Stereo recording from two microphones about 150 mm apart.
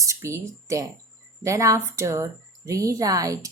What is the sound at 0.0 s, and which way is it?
Speech, 20° right (ahead or behind).